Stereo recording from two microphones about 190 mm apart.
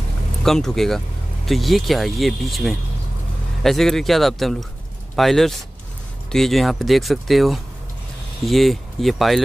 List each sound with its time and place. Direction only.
0.4 s speech: centre (ahead or behind)